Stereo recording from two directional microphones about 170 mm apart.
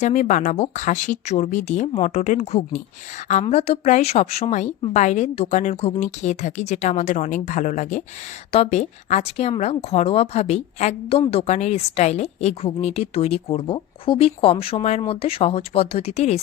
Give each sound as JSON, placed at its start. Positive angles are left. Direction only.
{"t": 0.0, "sound": "a woman's voice", "side_deg": 45}